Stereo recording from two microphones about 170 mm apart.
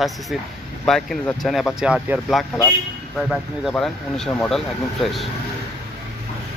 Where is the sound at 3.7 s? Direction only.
5° left (ahead or behind).